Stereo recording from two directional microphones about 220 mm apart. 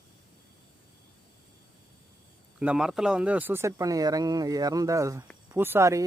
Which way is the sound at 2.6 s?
5° right (ahead or behind).